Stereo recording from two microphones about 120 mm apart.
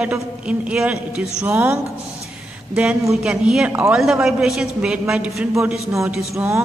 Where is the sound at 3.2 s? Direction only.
10° right (ahead or behind).